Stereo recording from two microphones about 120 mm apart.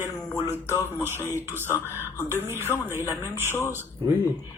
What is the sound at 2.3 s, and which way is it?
Speech, 20° right (ahead or behind).